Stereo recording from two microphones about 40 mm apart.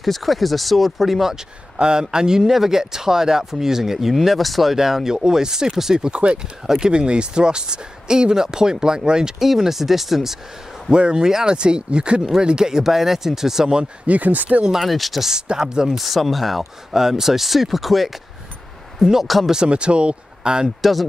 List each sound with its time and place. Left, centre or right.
0.0 s speech: centre
1.8 s speech: centre
9.5 s speech: centre
10.9 s speech: right
14.0 s speech: right
14.6 s speech: centre
14.9 s speech: centre
15.4 s speech: centre
16.0 s speech: centre
19.2 s speech: centre
19.5 s speech: right
20.6 s speech: centre